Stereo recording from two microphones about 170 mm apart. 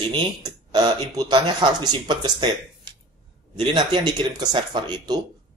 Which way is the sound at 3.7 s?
25° right (ahead or behind).